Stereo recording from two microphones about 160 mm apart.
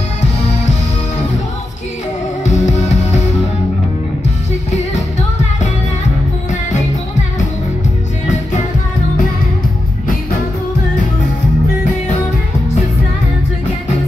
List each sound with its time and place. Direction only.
2.4 s music: 45° left (ahead or behind)